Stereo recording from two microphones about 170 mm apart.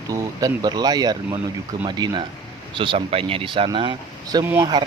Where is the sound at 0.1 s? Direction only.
20° right (ahead or behind).